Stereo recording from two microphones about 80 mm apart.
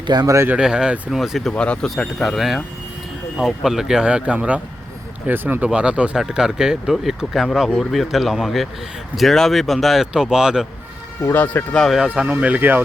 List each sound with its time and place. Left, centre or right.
0.1 s speech: right
0.6 s speech: centre
1.5 s speech: centre
11.2 s speech: left
11.7 s speech: centre
11.9 s speech: centre